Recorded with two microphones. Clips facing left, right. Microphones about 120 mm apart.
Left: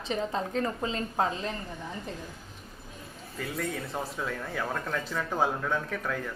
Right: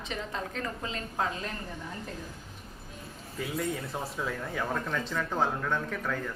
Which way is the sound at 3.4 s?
5° right (ahead or behind).